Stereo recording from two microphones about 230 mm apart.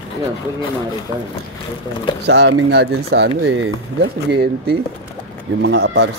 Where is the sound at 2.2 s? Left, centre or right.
Right.